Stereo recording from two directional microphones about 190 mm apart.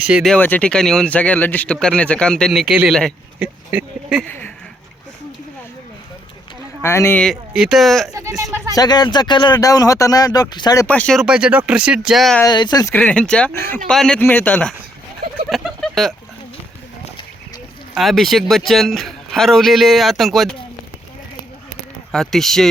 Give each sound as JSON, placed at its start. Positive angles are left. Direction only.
{"t": 0.1, "sound": "speech", "side_deg": 0}
{"t": 0.3, "sound": "speech", "side_deg": 10}
{"t": 4.3, "sound": "speech", "side_deg": 10}
{"t": 6.8, "sound": "speech", "side_deg": 15}
{"t": 8.1, "sound": "speech", "side_deg": -15}
{"t": 8.7, "sound": "speech", "side_deg": 20}
{"t": 10.8, "sound": "speech", "side_deg": 5}
{"t": 12.4, "sound": "speech", "side_deg": 20}
{"t": 15.4, "sound": "fowl", "side_deg": 0}
{"t": 17.9, "sound": "speech", "side_deg": 0}
{"t": 22.1, "sound": "speech", "side_deg": 0}